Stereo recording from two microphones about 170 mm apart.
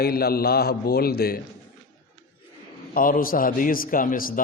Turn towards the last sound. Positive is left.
turn(degrees=55)  # may be behind; listen again after turning